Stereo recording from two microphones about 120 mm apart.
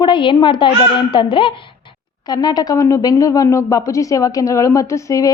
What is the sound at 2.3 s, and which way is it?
Speech, 35° left (ahead or behind).